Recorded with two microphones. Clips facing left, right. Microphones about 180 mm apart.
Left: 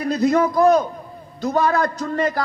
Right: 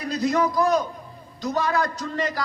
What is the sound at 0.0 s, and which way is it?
A man's voice, 55° left (ahead or behind).